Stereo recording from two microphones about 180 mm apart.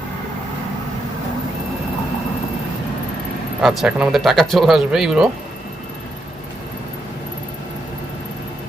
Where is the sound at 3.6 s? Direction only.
Centre (ahead or behind).